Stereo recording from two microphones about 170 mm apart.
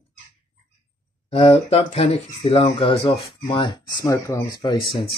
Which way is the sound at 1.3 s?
35° left (ahead or behind).